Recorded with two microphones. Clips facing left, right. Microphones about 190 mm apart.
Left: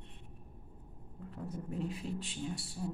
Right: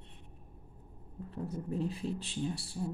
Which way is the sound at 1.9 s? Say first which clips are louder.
Right 3 dB; 35° right (ahead or behind).